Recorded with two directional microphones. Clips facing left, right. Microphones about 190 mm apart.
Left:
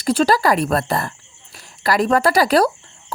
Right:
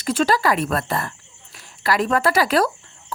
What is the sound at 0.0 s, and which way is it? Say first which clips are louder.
Speech: left 3 dB; 35° left (ahead or behind).